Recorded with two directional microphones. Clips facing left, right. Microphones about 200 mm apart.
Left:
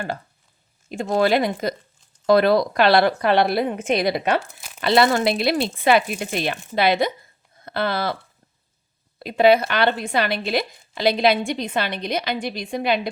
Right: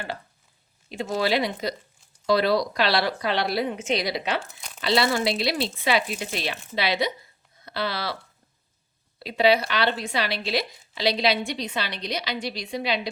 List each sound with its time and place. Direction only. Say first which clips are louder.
0.9 s speech: left 6 dB; 50° left (ahead or behind)